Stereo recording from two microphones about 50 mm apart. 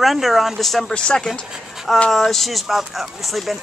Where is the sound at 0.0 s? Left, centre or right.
Centre.